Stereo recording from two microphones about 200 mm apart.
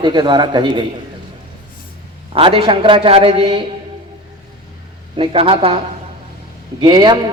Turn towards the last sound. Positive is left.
turn(degrees=-20)  # may be behind; listen again after turning